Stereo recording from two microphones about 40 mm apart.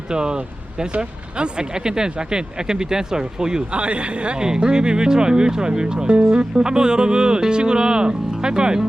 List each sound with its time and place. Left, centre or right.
0.1 s speech: centre
3.8 s speech: right